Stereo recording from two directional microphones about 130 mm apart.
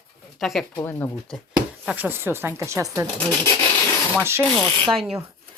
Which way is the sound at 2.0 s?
15° right (ahead or behind).